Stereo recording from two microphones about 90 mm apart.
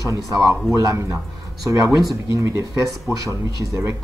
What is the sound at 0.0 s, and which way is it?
Speech, 40° right (ahead or behind).